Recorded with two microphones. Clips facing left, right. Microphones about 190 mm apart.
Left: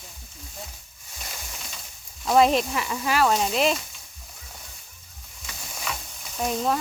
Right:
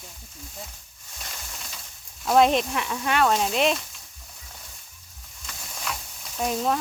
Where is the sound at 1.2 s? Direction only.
5° left (ahead or behind).